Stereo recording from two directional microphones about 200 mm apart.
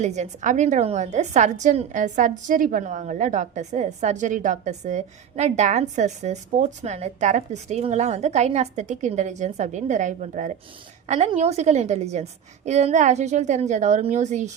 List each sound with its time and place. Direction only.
0.0 s a woman's voice: 35° right (ahead or behind)